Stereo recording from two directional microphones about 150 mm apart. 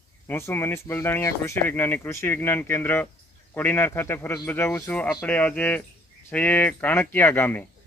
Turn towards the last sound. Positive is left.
turn(degrees=10)  # may be behind; listen again after turning